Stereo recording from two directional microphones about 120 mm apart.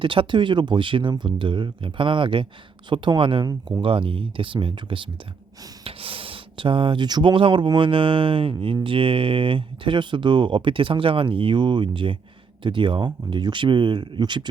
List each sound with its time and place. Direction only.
0.0 s speech: 45° right (ahead or behind)